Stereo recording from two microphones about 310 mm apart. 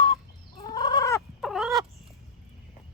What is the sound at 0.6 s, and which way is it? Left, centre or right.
Fowl, centre.